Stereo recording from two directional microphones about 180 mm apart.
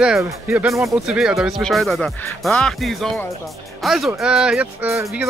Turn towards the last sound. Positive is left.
turn(degrees=-10)  # may be behind; listen again after turning